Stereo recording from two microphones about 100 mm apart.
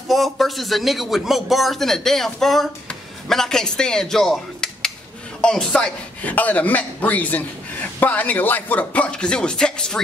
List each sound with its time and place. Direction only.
0.1 s a man's voice: centre (ahead or behind)